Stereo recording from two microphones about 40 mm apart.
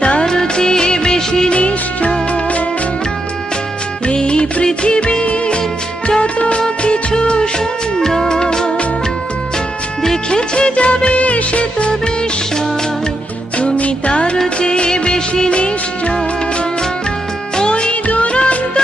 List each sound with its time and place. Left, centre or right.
0.0 s music of bollywood: left
1.5 s music: left
4.1 s music: left
8.0 s music: centre
10.3 s music of bollywood: left
13.6 s music: left
14.6 s music of bollywood: left
17.6 s music: left
18.0 s music of bollywood: left